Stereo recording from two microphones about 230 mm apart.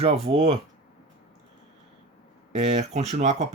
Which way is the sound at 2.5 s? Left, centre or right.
Right.